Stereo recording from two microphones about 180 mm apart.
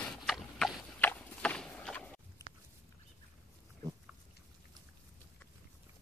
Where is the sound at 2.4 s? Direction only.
20° left (ahead or behind).